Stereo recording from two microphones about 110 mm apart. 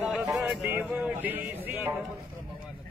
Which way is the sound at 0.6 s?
15° right (ahead or behind).